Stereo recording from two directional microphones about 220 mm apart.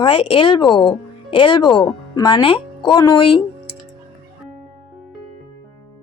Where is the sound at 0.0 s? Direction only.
25° left (ahead or behind).